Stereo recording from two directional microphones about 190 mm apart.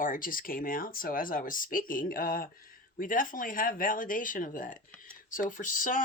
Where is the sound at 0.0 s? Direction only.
45° left (ahead or behind).